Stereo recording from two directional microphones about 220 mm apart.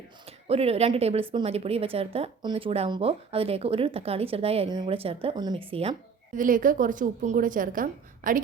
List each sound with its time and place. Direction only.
0.3 s speech: 25° right (ahead or behind)